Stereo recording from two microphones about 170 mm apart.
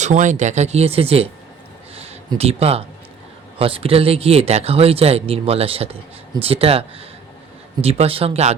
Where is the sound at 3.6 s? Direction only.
30° right (ahead or behind).